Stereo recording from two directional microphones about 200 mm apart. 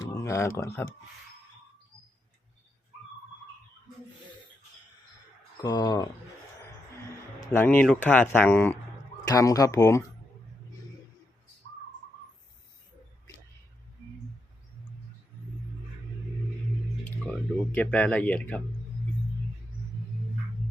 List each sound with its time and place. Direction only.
0.0 s a sound: 15° left (ahead or behind)
5.5 s speech: 20° left (ahead or behind)
7.5 s speech: 10° left (ahead or behind)
17.7 s speech: 5° left (ahead or behind)